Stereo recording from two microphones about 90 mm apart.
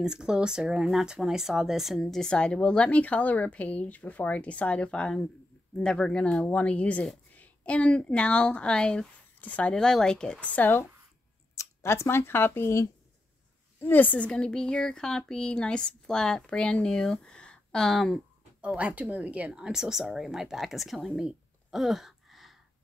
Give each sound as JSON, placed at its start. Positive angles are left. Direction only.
{"t": 0.0, "sound": "speech", "side_deg": -10}
{"t": 18.6, "sound": "speech", "side_deg": -15}